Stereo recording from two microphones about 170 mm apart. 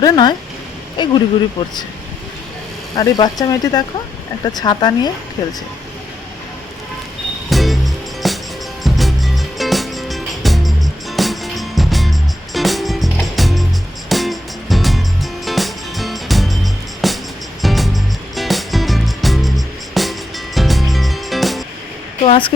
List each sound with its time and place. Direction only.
0.0 s speech: 25° left (ahead or behind)
2.9 s speech: 25° left (ahead or behind)
7.5 s music: centre (ahead or behind)
22.2 s speech: 30° left (ahead or behind)